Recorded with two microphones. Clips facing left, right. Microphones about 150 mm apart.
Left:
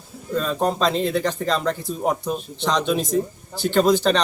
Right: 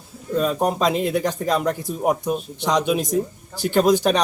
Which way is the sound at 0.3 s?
10° right (ahead or behind).